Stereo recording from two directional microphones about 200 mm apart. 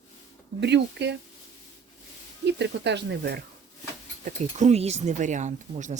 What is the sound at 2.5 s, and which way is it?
Speech, 60° right (ahead or behind).